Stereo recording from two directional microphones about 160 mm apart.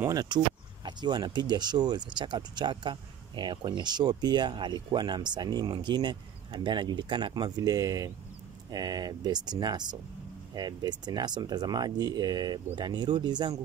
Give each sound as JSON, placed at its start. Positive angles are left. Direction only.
{"t": 0.0, "sound": "speech", "side_deg": -25}